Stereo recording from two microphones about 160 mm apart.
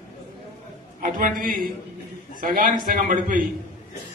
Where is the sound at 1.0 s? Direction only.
60° right (ahead or behind).